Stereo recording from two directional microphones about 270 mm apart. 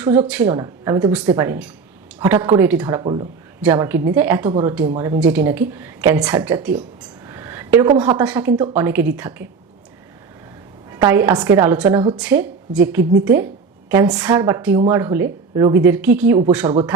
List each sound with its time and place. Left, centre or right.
0.0 s speech: centre
3.0 s speech: centre
3.6 s speech: centre
10.9 s speech: centre
12.1 s speech: centre